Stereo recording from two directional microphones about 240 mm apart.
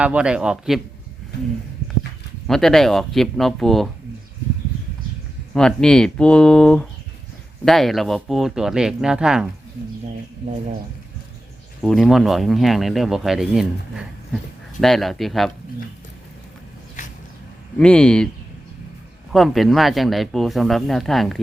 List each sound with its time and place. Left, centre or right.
0.0 s speech: centre
2.5 s speech: centre
5.5 s speech: centre
11.8 s speech: centre
17.0 s a sound: left
17.7 s speech: centre
19.3 s speech: centre